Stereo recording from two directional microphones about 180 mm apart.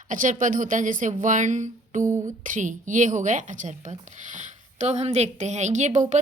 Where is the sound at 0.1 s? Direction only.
45° right (ahead or behind).